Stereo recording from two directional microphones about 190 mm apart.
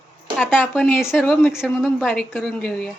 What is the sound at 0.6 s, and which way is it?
Speech, centre (ahead or behind).